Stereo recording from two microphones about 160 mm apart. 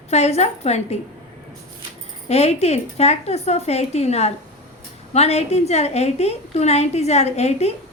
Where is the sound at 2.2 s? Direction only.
40° left (ahead or behind).